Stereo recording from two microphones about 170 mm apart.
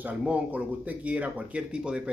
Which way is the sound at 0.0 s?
10° right (ahead or behind).